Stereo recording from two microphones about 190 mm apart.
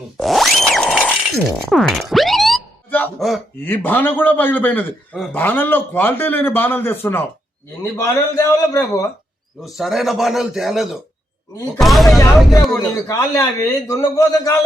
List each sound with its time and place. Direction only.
0.2 s music: centre (ahead or behind)
1.7 s boing: centre (ahead or behind)
3.6 s a man's voice: 10° left (ahead or behind)
9.6 s a man's voice: centre (ahead or behind)
12.7 s a man's voice: 20° left (ahead or behind)